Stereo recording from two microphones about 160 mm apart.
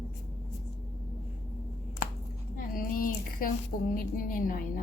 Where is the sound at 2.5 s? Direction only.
60° left (ahead or behind).